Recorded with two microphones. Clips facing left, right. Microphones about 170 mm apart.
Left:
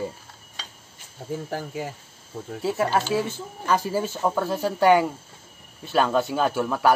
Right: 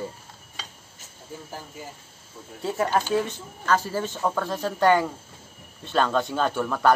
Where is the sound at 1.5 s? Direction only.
75° left (ahead or behind).